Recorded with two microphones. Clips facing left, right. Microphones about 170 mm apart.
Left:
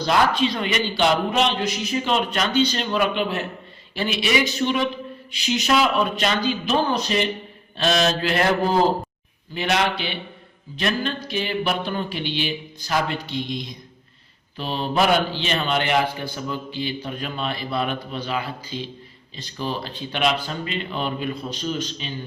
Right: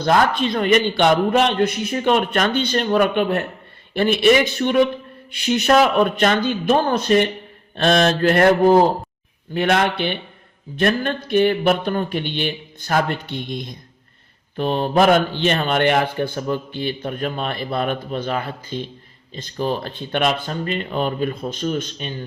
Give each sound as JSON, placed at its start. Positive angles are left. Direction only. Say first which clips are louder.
{"t": 0.0, "sound": "a man's voice", "louder": "right 2 dB", "side_deg": -50}